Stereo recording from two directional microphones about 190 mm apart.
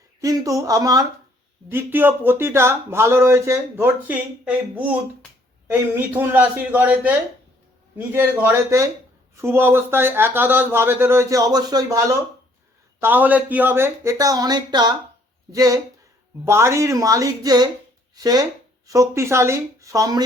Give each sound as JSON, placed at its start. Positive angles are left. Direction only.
{"t": 0.2, "sound": "speech", "side_deg": -15}